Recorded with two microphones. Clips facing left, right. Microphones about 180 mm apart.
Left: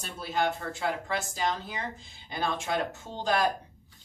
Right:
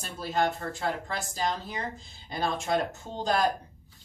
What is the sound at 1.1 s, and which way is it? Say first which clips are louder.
Speech: left 1 dB; 35° right (ahead or behind).